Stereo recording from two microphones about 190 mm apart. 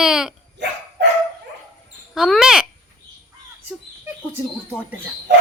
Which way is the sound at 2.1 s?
Centre (ahead or behind).